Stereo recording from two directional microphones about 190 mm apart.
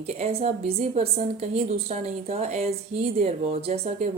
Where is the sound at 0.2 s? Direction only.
35° right (ahead or behind).